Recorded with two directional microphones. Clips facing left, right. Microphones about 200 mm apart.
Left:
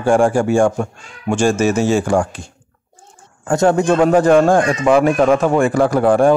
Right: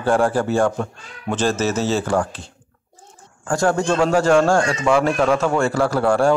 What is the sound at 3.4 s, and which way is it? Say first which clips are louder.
Speech: left 5 dB; 20° left (ahead or behind).